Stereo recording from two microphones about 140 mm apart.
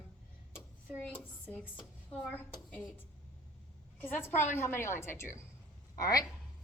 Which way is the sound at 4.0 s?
15° left (ahead or behind).